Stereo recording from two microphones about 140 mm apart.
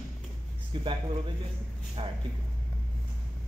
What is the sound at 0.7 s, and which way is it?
Speech, 35° right (ahead or behind).